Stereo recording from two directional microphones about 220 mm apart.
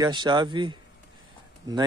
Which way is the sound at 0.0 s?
20° right (ahead or behind).